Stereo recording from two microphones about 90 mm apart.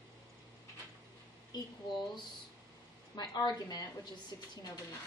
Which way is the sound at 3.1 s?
50° left (ahead or behind).